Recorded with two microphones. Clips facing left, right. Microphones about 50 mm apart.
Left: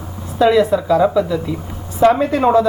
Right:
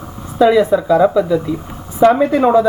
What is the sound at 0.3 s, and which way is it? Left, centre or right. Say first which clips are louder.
A woman's voice: right 2 dB; centre.